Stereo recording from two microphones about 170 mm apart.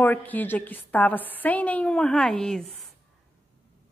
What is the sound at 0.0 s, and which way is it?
A woman's voice, 10° left (ahead or behind).